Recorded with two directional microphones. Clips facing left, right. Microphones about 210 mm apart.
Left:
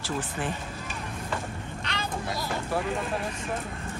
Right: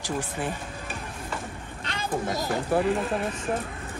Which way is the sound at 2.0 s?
45° right (ahead or behind).